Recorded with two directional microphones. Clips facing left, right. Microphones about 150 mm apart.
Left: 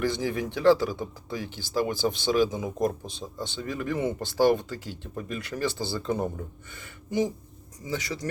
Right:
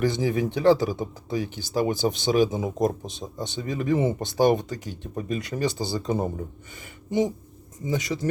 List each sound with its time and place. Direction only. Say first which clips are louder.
0.0 s speech: right 4 dB; 20° right (ahead or behind)
6.7 s a sound: right 3 dB; 20° right (ahead or behind)
7.9 s speech: right 5 dB; 20° right (ahead or behind)